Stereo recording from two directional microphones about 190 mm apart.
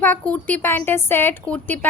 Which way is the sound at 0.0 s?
10° left (ahead or behind).